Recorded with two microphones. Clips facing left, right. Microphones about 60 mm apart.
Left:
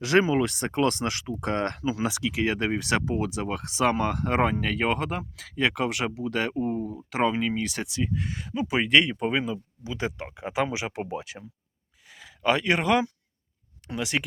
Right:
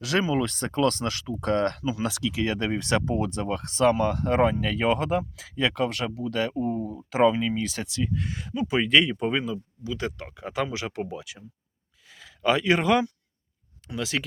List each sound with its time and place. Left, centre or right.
0.0 s speech: left
0.4 s speech: centre
4.6 s speech: centre; by 6.8 s left
6.8 s speech: centre
8.2 s speech: centre
9.4 s speech: left
11.0 s speech: left
12.0 s a sound: centre
13.9 s speech: centre